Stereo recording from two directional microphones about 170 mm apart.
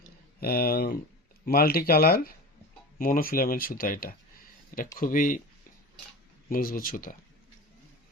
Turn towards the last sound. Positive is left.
turn(degrees=55)  # may be behind; listen again after turning